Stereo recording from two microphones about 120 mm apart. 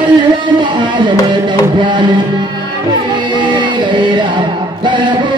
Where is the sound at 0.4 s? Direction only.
40° right (ahead or behind).